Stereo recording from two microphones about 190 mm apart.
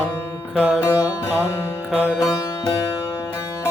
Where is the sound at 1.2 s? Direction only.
15° left (ahead or behind).